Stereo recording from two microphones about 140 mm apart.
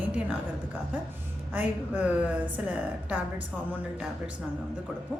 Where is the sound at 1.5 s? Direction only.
10° right (ahead or behind).